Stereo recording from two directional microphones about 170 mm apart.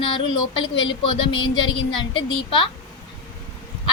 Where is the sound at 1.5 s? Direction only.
30° left (ahead or behind).